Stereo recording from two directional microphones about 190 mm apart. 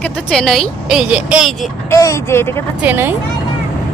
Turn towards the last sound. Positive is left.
turn(degrees=-10)  # may be behind; listen again after turning